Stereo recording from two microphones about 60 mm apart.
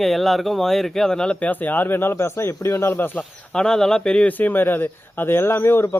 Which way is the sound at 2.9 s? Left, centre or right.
Left.